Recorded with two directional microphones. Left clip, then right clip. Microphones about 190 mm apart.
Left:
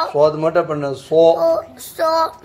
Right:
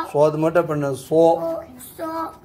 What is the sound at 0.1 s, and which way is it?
Speech, 35° right (ahead or behind).